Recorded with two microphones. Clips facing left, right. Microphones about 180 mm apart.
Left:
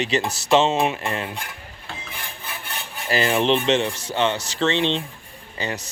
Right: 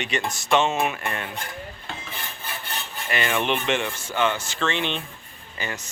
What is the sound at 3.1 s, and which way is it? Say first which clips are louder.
Speech: left 5 dB; 30° left (ahead or behind).